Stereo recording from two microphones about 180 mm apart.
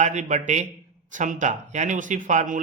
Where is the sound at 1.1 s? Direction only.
45° right (ahead or behind).